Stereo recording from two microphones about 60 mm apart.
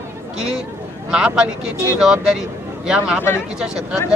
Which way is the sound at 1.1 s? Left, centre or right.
Centre.